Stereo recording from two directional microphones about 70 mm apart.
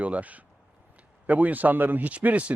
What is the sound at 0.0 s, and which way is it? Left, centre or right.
Speech, right.